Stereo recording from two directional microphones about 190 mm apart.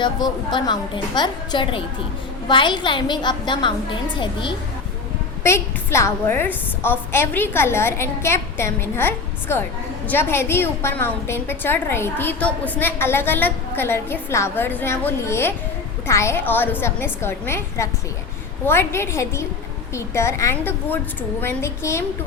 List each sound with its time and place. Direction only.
0.0 s a woman's voice: 25° left (ahead or behind)
5.4 s a woman's voice: 15° left (ahead or behind)